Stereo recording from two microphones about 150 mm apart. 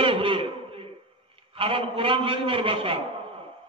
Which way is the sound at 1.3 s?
40° right (ahead or behind).